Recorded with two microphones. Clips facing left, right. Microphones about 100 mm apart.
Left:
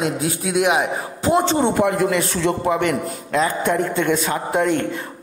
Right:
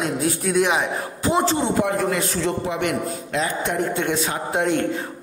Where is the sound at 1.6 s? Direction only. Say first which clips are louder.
Left 3 dB; 65° left (ahead or behind).